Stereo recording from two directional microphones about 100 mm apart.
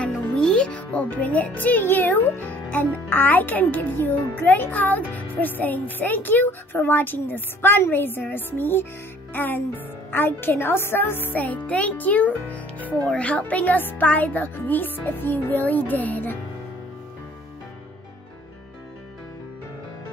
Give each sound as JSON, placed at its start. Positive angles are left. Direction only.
{"t": 0.0, "sound": "a child's voice", "side_deg": 10}